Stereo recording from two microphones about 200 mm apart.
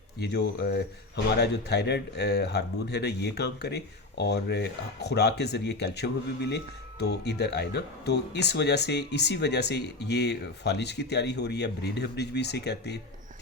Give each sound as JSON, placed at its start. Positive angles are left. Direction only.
{"t": 0.2, "sound": "speech", "side_deg": 55}